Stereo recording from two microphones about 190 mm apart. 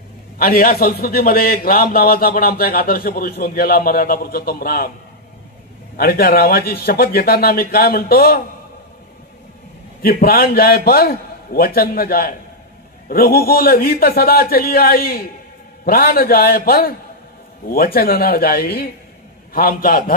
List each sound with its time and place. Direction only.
0.4 s a man's voice: 50° left (ahead or behind)
5.9 s a man's voice: 55° left (ahead or behind)
10.0 s a man's voice: 50° left (ahead or behind)